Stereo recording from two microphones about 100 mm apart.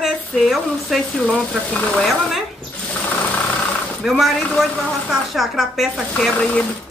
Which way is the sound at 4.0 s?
Centre (ahead or behind).